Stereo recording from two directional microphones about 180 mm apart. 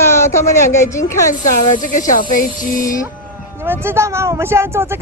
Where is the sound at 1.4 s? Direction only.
45° left (ahead or behind).